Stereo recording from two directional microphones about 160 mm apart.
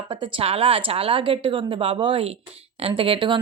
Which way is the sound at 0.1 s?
30° right (ahead or behind).